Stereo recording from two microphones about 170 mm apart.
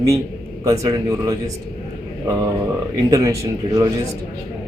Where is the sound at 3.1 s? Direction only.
20° right (ahead or behind).